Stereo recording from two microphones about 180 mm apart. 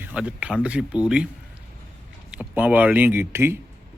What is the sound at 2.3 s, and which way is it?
Speech, 5° right (ahead or behind).